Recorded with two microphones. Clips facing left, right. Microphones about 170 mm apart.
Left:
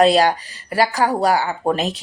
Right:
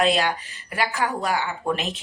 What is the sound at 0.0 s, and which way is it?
Speech, 35° left (ahead or behind).